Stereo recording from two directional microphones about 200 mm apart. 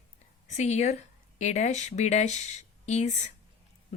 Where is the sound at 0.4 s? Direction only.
35° left (ahead or behind).